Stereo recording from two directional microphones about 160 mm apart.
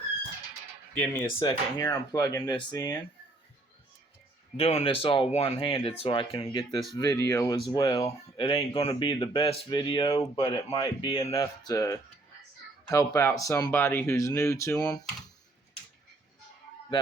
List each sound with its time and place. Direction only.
0.9 s speech: 15° left (ahead or behind)
4.5 s speech: 40° left (ahead or behind)
6.9 s speech: 20° left (ahead or behind)
8.4 s speech: 35° left (ahead or behind); by 14.8 s 20° left (ahead or behind)